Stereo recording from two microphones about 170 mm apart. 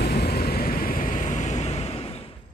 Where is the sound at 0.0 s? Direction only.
70° left (ahead or behind); by 2.3 s 35° left (ahead or behind).